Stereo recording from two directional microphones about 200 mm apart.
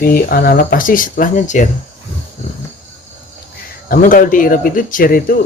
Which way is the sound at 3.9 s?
45° left (ahead or behind).